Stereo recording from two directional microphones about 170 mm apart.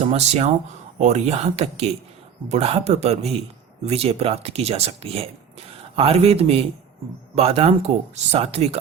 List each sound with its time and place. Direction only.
0.0 s speech: 40° right (ahead or behind)